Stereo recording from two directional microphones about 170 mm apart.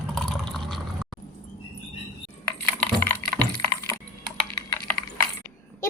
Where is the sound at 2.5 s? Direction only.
10° left (ahead or behind).